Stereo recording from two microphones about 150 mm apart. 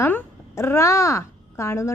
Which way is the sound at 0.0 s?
15° left (ahead or behind).